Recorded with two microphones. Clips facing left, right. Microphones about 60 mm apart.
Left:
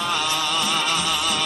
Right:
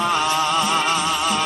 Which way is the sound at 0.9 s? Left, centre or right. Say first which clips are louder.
Right 3 dB; right.